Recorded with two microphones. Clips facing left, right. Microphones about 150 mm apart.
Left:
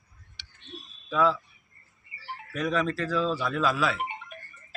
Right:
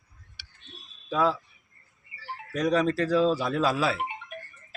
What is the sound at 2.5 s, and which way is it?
Speech, 40° right (ahead or behind).